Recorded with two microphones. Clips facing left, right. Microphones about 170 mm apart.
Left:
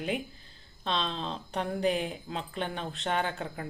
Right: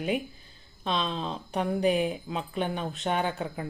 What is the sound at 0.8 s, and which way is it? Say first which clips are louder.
Speech: right 2 dB; 10° right (ahead or behind).